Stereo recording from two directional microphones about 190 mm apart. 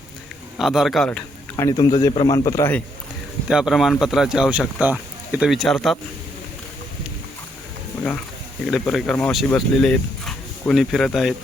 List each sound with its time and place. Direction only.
0.5 s a man's voice: centre (ahead or behind)
1.6 s a man's voice: 20° left (ahead or behind)
3.5 s speech: centre (ahead or behind)
8.9 s speech: centre (ahead or behind)